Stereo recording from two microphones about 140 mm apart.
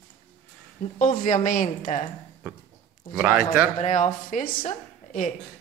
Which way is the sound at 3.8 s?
60° left (ahead or behind).